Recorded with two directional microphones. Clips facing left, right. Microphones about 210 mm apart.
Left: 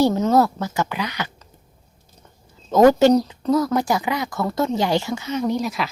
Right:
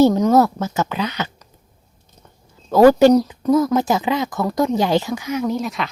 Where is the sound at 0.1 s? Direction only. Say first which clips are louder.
Right 3 dB; 15° right (ahead or behind).